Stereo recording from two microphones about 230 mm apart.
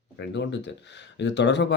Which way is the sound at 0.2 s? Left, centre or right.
Left.